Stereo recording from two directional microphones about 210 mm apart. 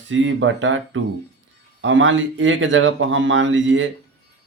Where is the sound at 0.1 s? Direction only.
65° right (ahead or behind).